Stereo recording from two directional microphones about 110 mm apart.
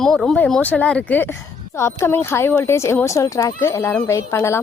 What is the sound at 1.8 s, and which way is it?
Speech, 25° left (ahead or behind).